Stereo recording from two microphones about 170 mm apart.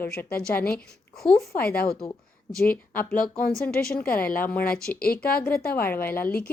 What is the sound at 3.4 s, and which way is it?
Speech, 60° left (ahead or behind).